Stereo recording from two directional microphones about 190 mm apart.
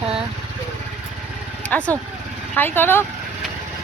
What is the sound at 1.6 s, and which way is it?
Speech, 5° left (ahead or behind).